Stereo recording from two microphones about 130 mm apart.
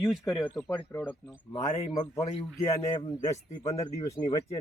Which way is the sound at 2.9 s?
35° left (ahead or behind).